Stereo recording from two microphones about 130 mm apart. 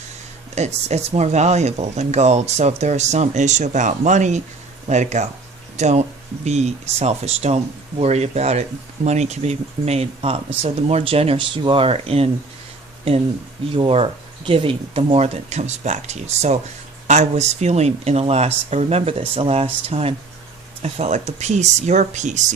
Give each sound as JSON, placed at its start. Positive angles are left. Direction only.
{"t": 0.5, "sound": "speech", "side_deg": -60}
{"t": 13.7, "sound": "speech", "side_deg": -45}